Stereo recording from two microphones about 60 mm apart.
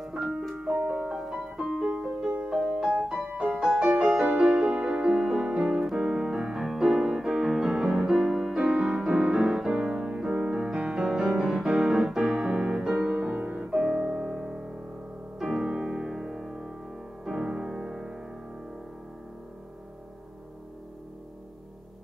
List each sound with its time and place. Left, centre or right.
0.0 s piano: centre
2.4 s music: centre
4.6 s music: right
4.8 s music: centre
9.7 s music: centre
12.2 s music: centre